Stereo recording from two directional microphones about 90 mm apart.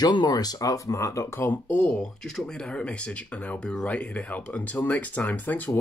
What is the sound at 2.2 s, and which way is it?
Speech, 5° left (ahead or behind).